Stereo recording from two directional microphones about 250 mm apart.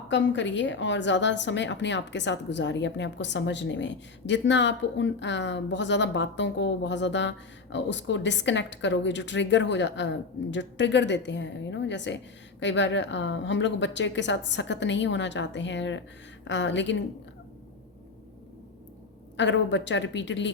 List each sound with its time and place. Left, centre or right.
0.1 s a woman's voice: left
19.4 s a woman's voice: left